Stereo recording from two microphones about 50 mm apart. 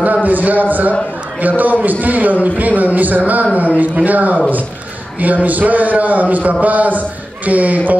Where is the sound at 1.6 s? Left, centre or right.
Right.